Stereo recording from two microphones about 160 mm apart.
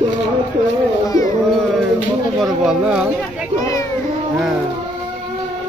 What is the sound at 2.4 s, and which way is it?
Speech, 5° right (ahead or behind).